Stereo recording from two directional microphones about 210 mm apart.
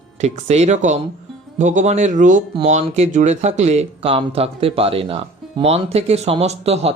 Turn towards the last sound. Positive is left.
turn(degrees=-30)  # may be behind; listen again after turning